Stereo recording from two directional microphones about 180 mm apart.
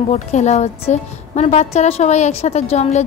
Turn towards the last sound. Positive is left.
turn(degrees=35)  # may be behind; listen again after turning